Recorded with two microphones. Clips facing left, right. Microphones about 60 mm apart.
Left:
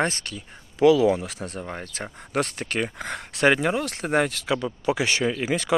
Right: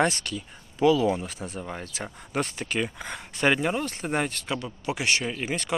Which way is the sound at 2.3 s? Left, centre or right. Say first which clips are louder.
Left 3 dB; left.